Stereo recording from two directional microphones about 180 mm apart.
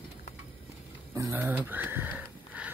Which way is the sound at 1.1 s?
15° right (ahead or behind).